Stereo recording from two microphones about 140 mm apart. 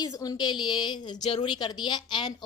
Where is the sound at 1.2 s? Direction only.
55° left (ahead or behind).